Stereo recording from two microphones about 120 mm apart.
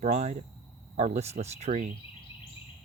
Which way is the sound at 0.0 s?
70° right (ahead or behind).